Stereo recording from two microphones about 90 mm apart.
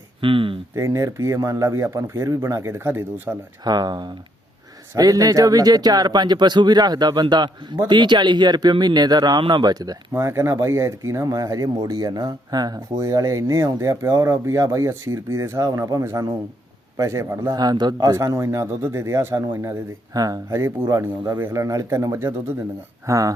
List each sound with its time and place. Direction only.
0.2 s speech: 75° right (ahead or behind)
0.8 s speech: 35° right (ahead or behind)
3.6 s a man's voice: 50° right (ahead or behind)
17.6 s speech: 50° right (ahead or behind); by 19.7 s 35° right (ahead or behind)
20.1 s a man's voice: 45° right (ahead or behind)
20.5 s speech: 30° right (ahead or behind)